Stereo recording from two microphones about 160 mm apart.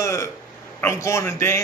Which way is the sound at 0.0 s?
20° left (ahead or behind).